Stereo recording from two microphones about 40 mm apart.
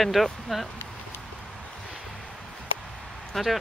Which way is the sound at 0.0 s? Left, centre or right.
Centre.